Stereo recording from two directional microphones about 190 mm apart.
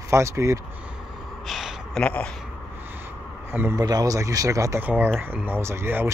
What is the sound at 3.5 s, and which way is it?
Speech, 15° right (ahead or behind).